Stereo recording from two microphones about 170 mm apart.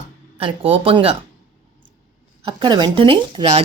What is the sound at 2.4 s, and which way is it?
Speech, 25° right (ahead or behind).